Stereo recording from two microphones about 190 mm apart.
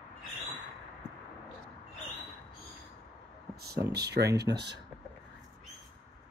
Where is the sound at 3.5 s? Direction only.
55° right (ahead or behind).